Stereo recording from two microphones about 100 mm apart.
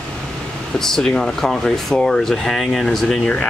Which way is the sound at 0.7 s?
5° left (ahead or behind).